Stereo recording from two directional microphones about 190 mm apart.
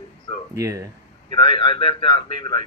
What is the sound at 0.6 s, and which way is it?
Speech, 15° right (ahead or behind).